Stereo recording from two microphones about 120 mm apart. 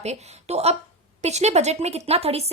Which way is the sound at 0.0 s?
65° right (ahead or behind).